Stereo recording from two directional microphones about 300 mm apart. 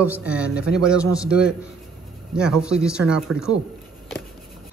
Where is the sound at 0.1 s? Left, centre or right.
Centre.